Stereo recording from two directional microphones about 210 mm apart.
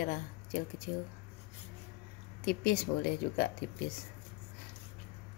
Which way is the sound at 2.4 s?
45° left (ahead or behind).